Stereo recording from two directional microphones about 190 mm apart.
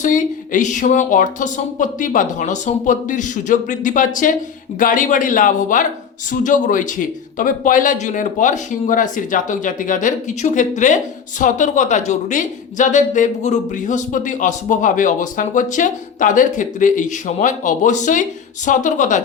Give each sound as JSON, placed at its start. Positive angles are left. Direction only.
{"t": 0.0, "sound": "speech", "side_deg": 45}